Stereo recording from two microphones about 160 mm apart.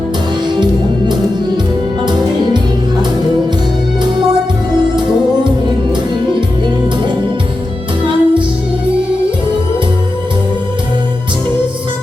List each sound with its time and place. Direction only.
8.0 s music: 30° right (ahead or behind)